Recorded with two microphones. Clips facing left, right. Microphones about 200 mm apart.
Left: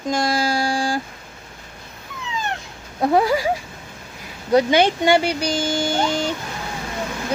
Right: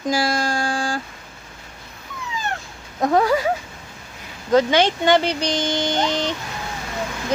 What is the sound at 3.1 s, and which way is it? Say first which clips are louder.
Speech: left 1 dB; 10° left (ahead or behind).